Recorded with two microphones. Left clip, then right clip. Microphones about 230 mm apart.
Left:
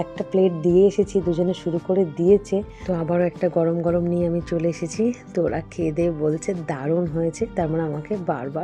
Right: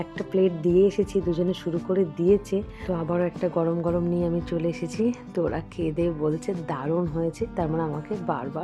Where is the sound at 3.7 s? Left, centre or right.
Centre.